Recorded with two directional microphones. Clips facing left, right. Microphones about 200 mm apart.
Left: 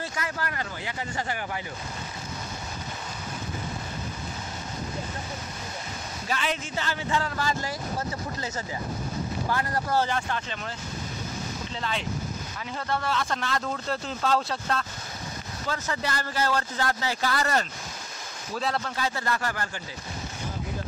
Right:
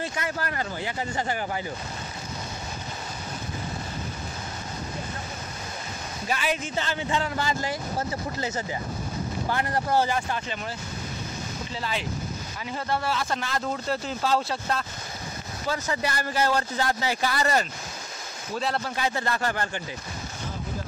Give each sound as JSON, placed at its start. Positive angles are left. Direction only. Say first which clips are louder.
{"t": 0.0, "sound": "speech", "louder": "right 2 dB", "side_deg": -25}
{"t": 6.2, "sound": "speech", "louder": "right 2 dB", "side_deg": -10}
{"t": 9.5, "sound": "speech", "louder": "right 2 dB", "side_deg": -25}
{"t": 10.0, "sound": "speech", "louder": "right 2 dB", "side_deg": -10}
{"t": 11.8, "sound": "speech", "louder": "even", "side_deg": -5}
{"t": 18.5, "sound": "speech", "louder": "right 1 dB", "side_deg": 0}
{"t": 18.9, "sound": "speech", "louder": "right 2 dB", "side_deg": -15}
{"t": 19.2, "sound": "speech", "louder": "right 2 dB", "side_deg": -25}